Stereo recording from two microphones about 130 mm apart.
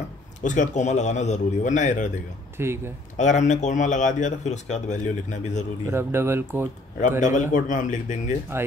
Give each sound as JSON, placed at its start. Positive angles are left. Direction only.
{"t": 0.4, "sound": "a man's voice", "side_deg": 75}
{"t": 2.5, "sound": "speech", "side_deg": -20}
{"t": 3.2, "sound": "a man's voice", "side_deg": 65}
{"t": 5.9, "sound": "speech", "side_deg": -20}
{"t": 7.0, "sound": "a man's voice", "side_deg": 75}